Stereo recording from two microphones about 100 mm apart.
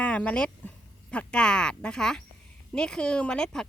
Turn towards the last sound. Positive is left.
turn(degrees=5)  # may be behind; listen again after turning